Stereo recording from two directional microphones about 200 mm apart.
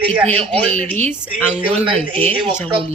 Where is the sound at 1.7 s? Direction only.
30° right (ahead or behind).